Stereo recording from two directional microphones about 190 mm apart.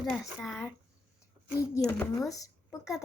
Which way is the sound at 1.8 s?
10° left (ahead or behind).